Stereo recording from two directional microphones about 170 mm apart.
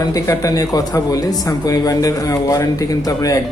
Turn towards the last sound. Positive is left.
turn(degrees=20)  # may be behind; listen again after turning